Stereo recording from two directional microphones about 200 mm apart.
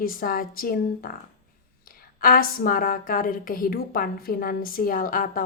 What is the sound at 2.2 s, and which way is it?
A woman's voice, 45° left (ahead or behind).